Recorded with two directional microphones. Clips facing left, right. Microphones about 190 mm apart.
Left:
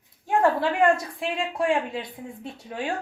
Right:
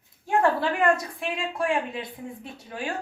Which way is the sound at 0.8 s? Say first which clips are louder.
Left 4 dB; 25° left (ahead or behind).